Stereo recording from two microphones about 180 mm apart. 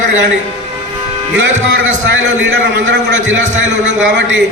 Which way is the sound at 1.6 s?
90° right.